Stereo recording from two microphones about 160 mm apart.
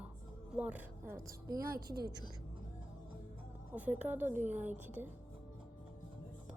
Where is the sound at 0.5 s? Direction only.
10° right (ahead or behind).